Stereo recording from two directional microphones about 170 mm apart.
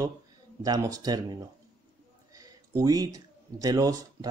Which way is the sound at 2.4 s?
20° right (ahead or behind).